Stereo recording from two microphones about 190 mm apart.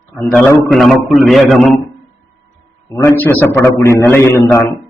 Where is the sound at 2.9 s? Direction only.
10° left (ahead or behind).